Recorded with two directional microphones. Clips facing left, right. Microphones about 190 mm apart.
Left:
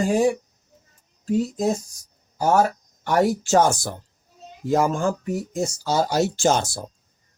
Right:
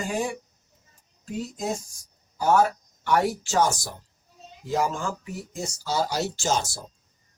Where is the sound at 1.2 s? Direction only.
35° left (ahead or behind).